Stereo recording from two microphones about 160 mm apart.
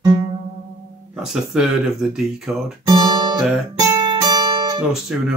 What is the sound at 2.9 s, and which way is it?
Guitar, 25° right (ahead or behind).